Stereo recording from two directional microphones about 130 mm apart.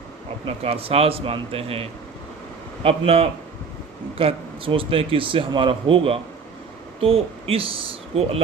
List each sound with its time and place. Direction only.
0.4 s speech: 50° right (ahead or behind)